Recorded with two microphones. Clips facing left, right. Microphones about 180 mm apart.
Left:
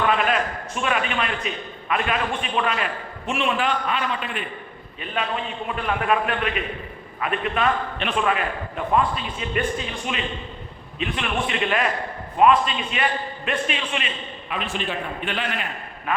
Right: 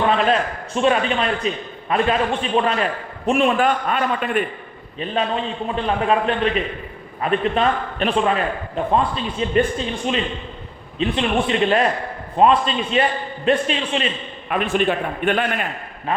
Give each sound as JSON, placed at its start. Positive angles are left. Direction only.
{"t": 0.0, "sound": "a man's voice", "side_deg": -30}
{"t": 5.6, "sound": "a man's voice", "side_deg": -30}
{"t": 10.9, "sound": "a man's voice", "side_deg": -30}
{"t": 14.5, "sound": "a man's voice", "side_deg": -55}
{"t": 16.1, "sound": "a man's voice", "side_deg": -35}